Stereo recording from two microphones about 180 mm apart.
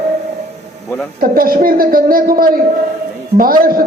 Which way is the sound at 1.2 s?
55° right (ahead or behind).